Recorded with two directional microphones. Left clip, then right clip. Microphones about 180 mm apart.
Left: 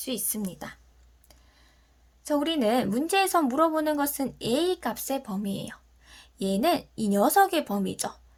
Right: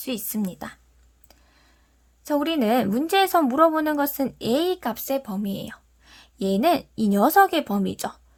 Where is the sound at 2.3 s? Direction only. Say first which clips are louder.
Right 3 dB; 45° right (ahead or behind).